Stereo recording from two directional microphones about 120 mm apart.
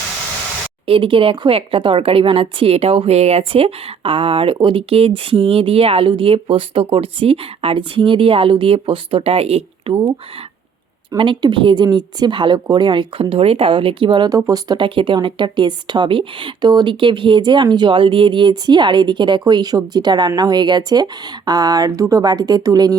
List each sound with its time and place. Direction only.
0.9 s speech: 50° right (ahead or behind)
9.9 s speech: 40° right (ahead or behind)
11.2 s speech: 45° right (ahead or behind)
14.3 s speech: 30° right (ahead or behind)